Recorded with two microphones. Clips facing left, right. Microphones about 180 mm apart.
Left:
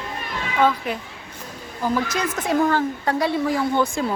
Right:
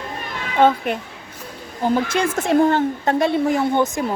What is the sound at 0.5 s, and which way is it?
Speech, 25° right (ahead or behind).